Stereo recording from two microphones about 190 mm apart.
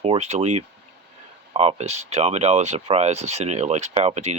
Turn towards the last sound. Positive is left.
turn(degrees=-35)  # may be behind; listen again after turning